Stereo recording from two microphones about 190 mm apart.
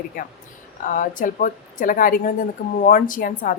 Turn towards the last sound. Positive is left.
turn(degrees=45)  # may be behind; listen again after turning